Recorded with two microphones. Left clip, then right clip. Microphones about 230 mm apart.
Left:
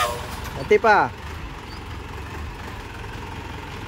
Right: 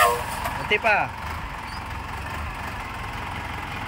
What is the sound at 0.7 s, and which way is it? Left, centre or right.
Speech, centre.